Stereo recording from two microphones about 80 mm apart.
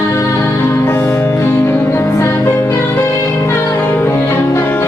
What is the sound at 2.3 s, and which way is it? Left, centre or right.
Music, left.